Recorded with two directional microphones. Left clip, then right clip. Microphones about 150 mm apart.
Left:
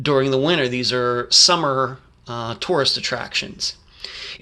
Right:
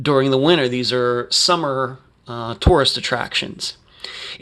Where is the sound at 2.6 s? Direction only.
45° right (ahead or behind).